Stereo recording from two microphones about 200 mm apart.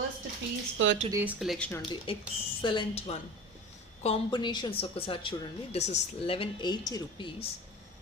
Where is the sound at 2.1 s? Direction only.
25° left (ahead or behind).